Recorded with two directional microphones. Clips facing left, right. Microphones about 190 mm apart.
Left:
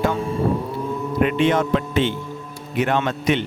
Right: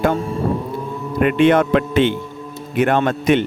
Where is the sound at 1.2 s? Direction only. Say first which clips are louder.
Right 5 dB; 60° right (ahead or behind).